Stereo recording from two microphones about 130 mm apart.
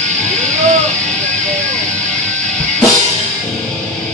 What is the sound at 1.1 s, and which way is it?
Music, 5° left (ahead or behind).